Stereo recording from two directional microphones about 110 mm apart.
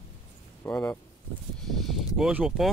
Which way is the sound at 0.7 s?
35° left (ahead or behind).